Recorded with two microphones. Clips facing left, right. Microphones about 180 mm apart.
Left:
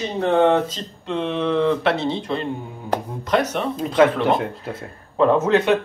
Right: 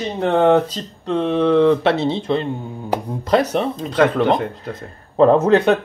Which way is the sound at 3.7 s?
5° left (ahead or behind).